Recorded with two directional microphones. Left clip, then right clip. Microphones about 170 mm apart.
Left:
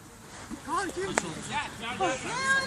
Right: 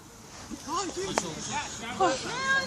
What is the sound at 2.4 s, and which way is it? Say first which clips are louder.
Speech: left 2 dB; 55° left (ahead or behind).